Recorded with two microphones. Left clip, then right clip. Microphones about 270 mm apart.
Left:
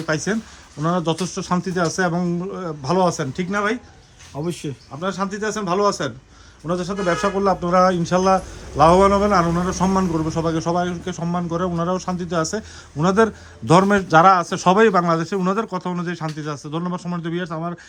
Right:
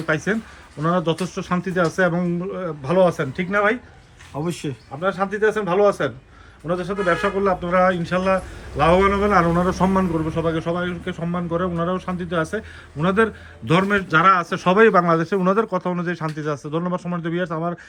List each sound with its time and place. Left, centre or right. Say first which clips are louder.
0.8 s a man's voice: right 1 dB; centre